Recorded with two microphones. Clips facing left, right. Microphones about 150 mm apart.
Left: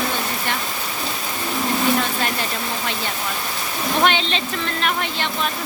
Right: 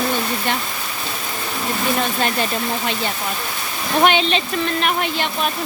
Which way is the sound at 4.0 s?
15° right (ahead or behind).